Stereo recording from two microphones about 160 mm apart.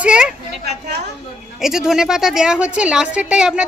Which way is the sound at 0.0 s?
5° right (ahead or behind).